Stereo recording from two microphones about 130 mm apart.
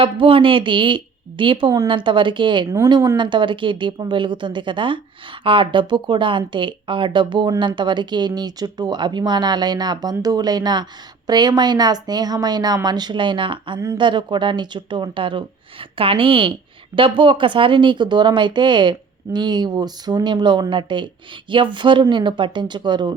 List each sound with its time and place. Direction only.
0.0 s a woman's voice: 45° right (ahead or behind)